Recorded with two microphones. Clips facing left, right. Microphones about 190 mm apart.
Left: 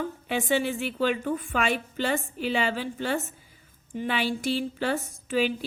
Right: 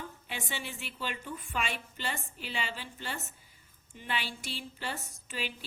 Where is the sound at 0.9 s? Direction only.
55° left (ahead or behind).